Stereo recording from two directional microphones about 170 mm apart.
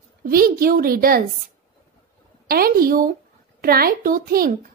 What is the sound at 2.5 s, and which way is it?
A woman's voice, 60° right (ahead or behind).